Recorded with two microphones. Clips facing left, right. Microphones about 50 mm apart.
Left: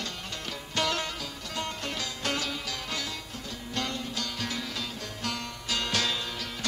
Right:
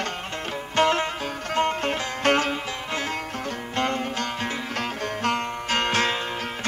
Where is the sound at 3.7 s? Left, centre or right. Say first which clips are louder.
Right 8 dB; right.